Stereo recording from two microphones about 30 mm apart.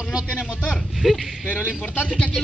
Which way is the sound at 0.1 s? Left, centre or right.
Right.